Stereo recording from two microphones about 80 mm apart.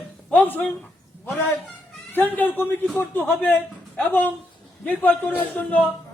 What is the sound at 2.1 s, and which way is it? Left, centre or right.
A man's voice, left.